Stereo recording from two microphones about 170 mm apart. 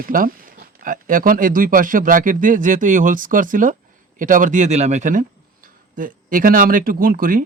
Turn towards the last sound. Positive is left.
turn(degrees=-55)  # may be behind; listen again after turning